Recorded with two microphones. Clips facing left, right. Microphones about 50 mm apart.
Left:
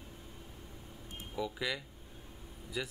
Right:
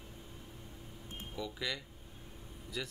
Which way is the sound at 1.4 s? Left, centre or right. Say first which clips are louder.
Left 3 dB; centre.